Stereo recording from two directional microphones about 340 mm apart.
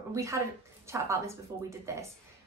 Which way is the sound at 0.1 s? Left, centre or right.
Centre.